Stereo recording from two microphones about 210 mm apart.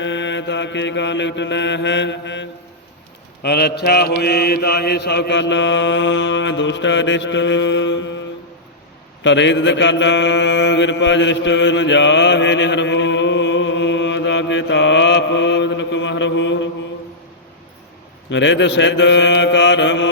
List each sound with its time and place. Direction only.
0.0 s mantra: 60° left (ahead or behind)
9.2 s mantra: 60° left (ahead or behind)
18.3 s mantra: 60° left (ahead or behind)